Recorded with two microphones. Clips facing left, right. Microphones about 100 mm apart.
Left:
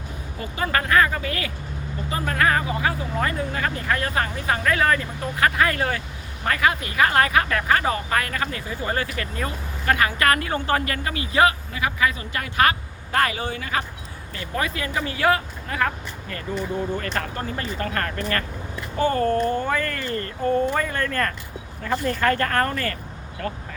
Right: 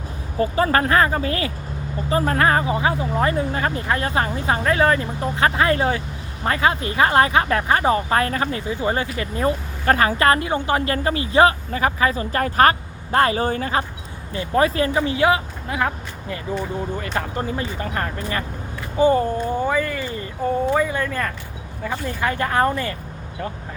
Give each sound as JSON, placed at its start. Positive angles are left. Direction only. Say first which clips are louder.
{"t": 0.3, "sound": "speech", "louder": "right 7 dB", "side_deg": -35}
{"t": 10.8, "sound": "speech", "louder": "right 6 dB", "side_deg": -30}
{"t": 17.0, "sound": "speech", "louder": "right 3 dB", "side_deg": -15}